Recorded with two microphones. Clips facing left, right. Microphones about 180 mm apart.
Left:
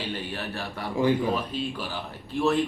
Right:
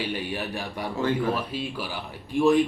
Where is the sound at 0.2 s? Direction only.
10° right (ahead or behind).